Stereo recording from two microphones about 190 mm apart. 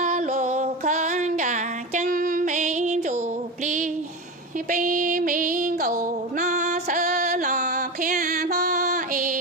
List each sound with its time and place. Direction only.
0.0 s music: 35° right (ahead or behind); by 8.5 s 55° right (ahead or behind)
8.5 s female singing: 40° right (ahead or behind)